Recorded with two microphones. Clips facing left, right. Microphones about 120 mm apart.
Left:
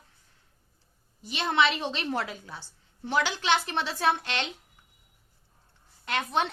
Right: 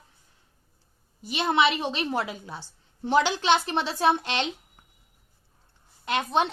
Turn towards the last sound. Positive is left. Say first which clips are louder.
# right 3 dB
turn(degrees=-20)  # may be behind; listen again after turning